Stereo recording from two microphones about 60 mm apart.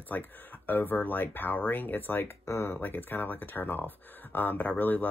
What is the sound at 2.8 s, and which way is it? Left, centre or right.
Speech, left.